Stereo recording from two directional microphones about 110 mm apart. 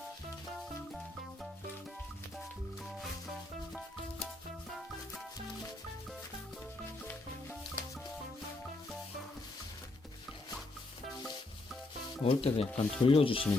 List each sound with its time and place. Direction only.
12.2 s speech: 65° left (ahead or behind)